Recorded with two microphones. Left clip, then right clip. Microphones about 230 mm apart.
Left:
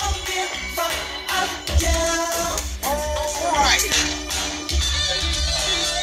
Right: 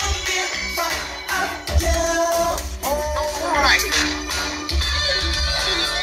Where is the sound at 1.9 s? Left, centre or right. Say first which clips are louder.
Right 3 dB; left.